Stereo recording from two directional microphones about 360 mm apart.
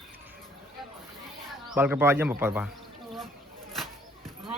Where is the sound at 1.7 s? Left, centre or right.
Centre.